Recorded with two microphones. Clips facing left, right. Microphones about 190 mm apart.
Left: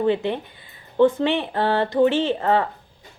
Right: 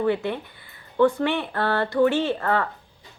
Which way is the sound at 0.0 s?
20° left (ahead or behind).